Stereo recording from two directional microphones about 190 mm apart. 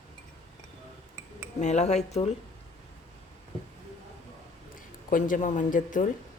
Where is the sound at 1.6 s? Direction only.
35° left (ahead or behind).